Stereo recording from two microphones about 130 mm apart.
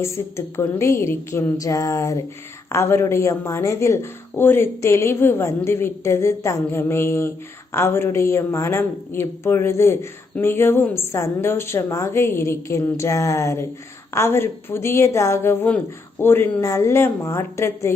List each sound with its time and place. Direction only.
0.0 s a woman's voice: 20° left (ahead or behind)